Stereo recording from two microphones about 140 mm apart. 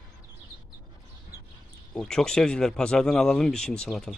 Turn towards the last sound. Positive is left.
turn(degrees=5)  # may be behind; listen again after turning